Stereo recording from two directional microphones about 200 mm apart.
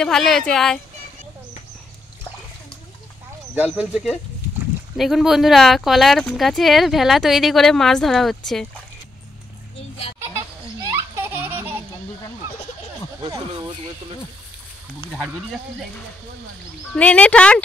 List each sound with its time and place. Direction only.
0.0 s speech: centre (ahead or behind)
3.5 s speech: 5° right (ahead or behind)
10.8 s baby laughter: 10° right (ahead or behind)
13.2 s a sound: 20° right (ahead or behind)
16.9 s speech: 5° left (ahead or behind)